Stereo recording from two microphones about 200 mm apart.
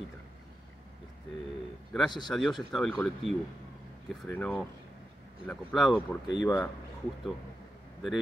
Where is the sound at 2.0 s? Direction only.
20° left (ahead or behind).